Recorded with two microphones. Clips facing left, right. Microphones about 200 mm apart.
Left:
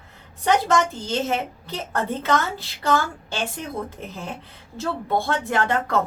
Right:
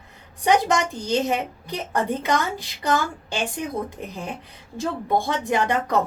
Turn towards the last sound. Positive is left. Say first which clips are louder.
# right 1 dB
turn(degrees=-15)  # may be behind; listen again after turning